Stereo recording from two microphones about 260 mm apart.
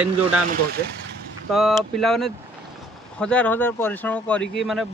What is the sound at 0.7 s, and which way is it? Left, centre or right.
Speech, right.